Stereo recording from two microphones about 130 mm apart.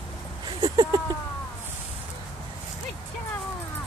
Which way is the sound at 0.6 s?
30° right (ahead or behind).